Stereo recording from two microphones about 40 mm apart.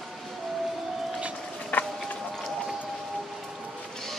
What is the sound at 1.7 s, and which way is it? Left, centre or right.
Run, left.